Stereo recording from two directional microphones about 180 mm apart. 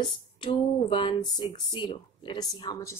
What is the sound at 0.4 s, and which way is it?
Speech, 30° left (ahead or behind).